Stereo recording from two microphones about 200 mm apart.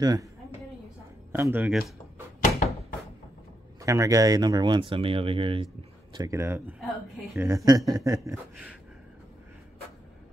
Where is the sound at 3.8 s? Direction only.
15° right (ahead or behind).